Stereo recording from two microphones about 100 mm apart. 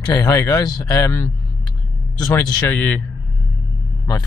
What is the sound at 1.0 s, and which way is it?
Speech, 30° left (ahead or behind).